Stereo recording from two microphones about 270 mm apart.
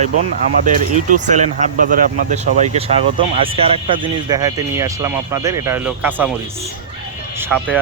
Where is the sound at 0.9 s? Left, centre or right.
Right; by 6.3 s centre.